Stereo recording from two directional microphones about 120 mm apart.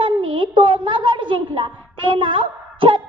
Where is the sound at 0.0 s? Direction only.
45° right (ahead or behind).